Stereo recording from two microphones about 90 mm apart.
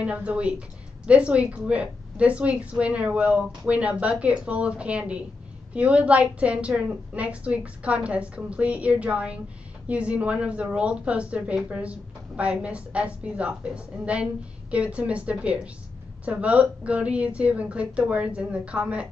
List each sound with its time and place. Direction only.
0.0 s a woman's voice: 15° right (ahead or behind)